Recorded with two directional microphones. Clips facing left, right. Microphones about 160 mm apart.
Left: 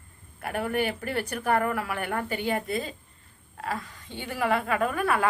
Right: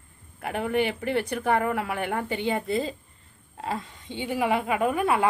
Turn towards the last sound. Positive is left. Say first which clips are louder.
# right 2 dB
turn(degrees=-20)  # may be behind; listen again after turning